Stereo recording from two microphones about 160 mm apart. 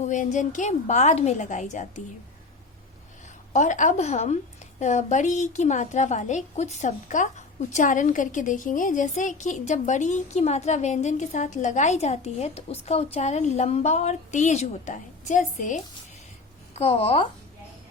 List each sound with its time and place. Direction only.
0.0 s a woman's voice: 50° left (ahead or behind)
3.5 s a woman's voice: 50° left (ahead or behind)
16.7 s a woman's voice: 35° left (ahead or behind)